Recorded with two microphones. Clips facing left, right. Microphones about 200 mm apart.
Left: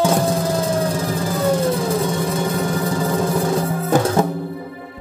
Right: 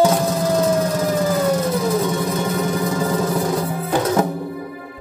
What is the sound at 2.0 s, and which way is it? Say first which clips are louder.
Music: even; 30° left (ahead or behind).